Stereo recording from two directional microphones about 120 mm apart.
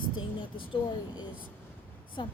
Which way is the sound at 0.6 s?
40° left (ahead or behind).